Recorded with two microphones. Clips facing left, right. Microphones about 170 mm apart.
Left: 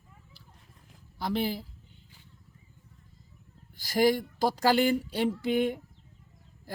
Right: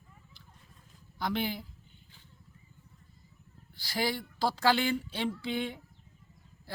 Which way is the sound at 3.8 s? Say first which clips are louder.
Left 9 dB; 45° left (ahead or behind).